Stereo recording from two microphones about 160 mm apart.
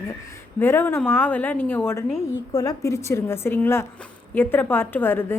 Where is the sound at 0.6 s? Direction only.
15° left (ahead or behind).